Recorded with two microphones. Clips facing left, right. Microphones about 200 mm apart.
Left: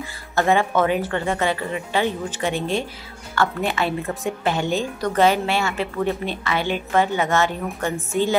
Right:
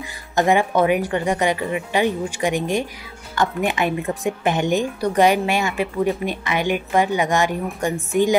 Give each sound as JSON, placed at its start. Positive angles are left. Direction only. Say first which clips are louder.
{"t": 0.0, "sound": "a woman's voice", "louder": "right 2 dB", "side_deg": -15}